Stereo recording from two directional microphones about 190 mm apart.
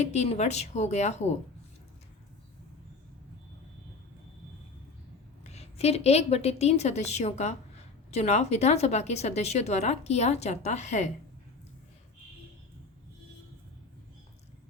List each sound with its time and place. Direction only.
0.0 s a woman's voice: 35° left (ahead or behind)
5.4 s a woman's voice: 35° left (ahead or behind)